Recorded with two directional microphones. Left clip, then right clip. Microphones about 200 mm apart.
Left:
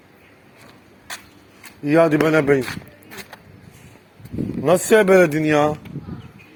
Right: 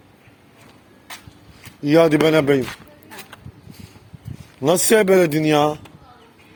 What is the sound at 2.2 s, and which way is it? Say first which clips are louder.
Speech: right 1 dB; 65° right (ahead or behind).